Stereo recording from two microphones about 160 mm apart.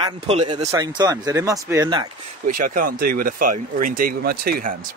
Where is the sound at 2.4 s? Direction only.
60° right (ahead or behind).